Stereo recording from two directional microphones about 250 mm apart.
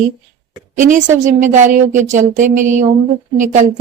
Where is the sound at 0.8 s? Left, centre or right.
Right.